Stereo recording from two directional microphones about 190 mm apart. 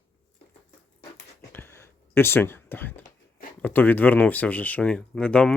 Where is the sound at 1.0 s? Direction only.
60° left (ahead or behind).